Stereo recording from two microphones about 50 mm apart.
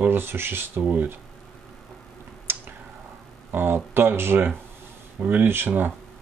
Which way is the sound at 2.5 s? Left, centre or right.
Right.